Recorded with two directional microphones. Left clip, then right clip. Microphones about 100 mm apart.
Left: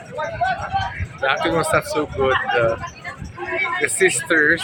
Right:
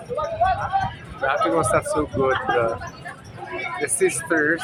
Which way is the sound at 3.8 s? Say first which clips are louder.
Left 2 dB; 15° left (ahead or behind).